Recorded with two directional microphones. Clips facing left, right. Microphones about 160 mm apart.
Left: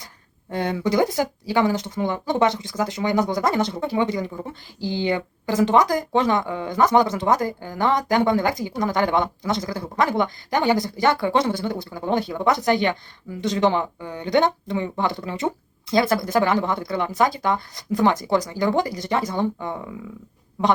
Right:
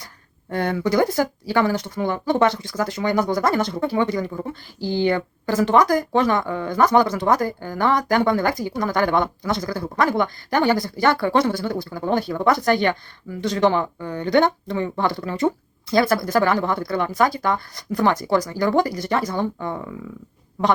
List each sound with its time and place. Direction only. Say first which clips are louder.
0.5 s speech: right 1 dB; 20° left (ahead or behind)